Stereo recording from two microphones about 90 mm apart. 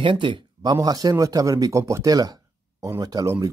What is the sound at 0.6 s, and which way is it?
Speech, 45° right (ahead or behind).